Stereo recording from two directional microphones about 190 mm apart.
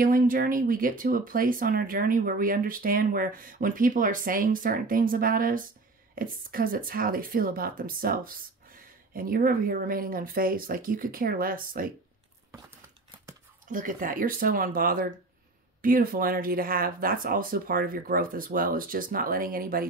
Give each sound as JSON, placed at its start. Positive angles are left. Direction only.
{"t": 0.0, "sound": "speech", "side_deg": -50}
{"t": 13.7, "sound": "speech", "side_deg": -45}